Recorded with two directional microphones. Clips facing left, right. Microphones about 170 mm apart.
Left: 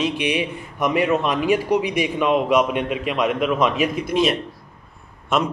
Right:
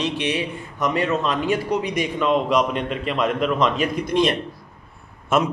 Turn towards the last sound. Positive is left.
turn(degrees=-5)  # may be behind; listen again after turning